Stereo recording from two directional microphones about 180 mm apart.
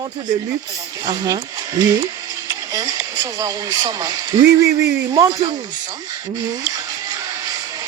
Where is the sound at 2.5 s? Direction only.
20° right (ahead or behind).